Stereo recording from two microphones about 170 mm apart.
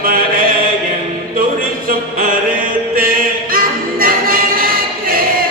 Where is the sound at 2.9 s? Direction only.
55° right (ahead or behind).